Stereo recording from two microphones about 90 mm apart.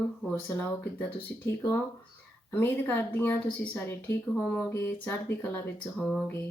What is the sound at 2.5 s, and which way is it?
A woman's voice, 20° left (ahead or behind).